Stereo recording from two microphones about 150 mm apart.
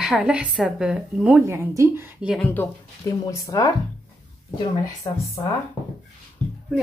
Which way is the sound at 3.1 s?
20° left (ahead or behind).